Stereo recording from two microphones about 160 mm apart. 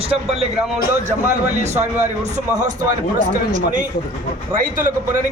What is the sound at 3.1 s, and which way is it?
A man's voice, 50° right (ahead or behind).